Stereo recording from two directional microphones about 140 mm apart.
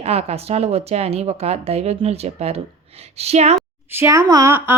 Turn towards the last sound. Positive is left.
turn(degrees=-20)  # may be behind; listen again after turning